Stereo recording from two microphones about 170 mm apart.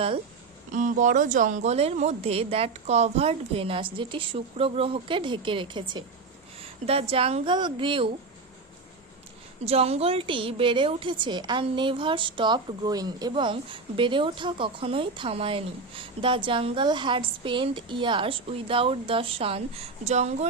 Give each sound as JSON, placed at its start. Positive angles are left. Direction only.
{"t": 0.7, "sound": "a woman's voice", "side_deg": -50}
{"t": 9.6, "sound": "a woman's voice", "side_deg": -35}